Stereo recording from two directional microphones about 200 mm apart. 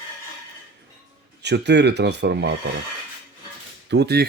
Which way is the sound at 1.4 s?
60° right (ahead or behind).